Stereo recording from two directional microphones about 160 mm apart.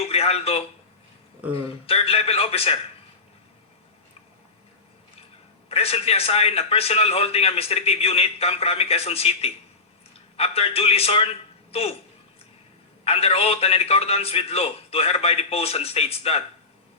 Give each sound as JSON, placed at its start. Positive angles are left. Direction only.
{"t": 0.0, "sound": "a sound", "side_deg": 40}
{"t": 1.5, "sound": "a man's voice", "side_deg": 35}
{"t": 5.6, "sound": "a man's voice", "side_deg": 40}
{"t": 13.1, "sound": "a man's voice", "side_deg": 40}